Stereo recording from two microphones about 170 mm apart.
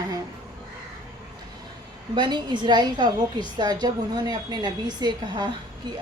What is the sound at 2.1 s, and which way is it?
A woman's voice, 25° right (ahead or behind).